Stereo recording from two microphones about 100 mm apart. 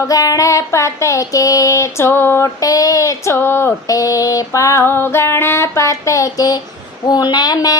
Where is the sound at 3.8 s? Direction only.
35° left (ahead or behind).